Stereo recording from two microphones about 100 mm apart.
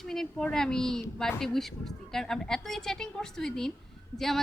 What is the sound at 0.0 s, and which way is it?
Speech, 5° left (ahead or behind).